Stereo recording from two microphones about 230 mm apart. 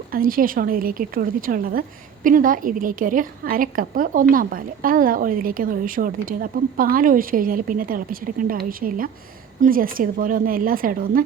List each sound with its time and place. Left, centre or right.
0.1 s a woman's voice: right